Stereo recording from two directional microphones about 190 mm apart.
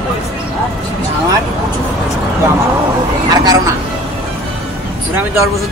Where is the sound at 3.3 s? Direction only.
20° right (ahead or behind).